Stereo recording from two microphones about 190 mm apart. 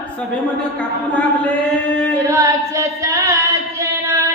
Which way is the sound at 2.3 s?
15° right (ahead or behind).